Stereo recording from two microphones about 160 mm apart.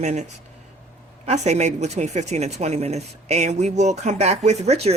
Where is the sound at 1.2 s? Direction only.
45° right (ahead or behind).